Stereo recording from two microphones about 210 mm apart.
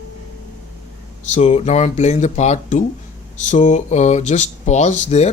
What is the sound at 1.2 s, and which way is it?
Speech, 35° left (ahead or behind).